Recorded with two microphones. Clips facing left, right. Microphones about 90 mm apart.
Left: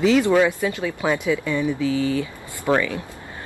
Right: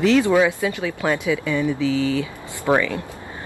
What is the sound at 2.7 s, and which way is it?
Speech, 25° right (ahead or behind).